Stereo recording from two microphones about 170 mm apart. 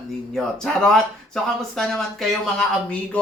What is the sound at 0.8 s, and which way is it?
Speech, 5° left (ahead or behind).